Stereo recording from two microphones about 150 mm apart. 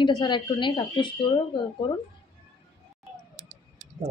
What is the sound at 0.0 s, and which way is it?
Speech, 30° left (ahead or behind).